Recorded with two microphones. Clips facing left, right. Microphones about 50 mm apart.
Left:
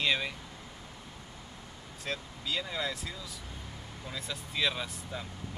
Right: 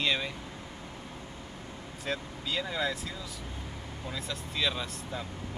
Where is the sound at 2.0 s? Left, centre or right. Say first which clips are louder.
Right 2 dB; centre.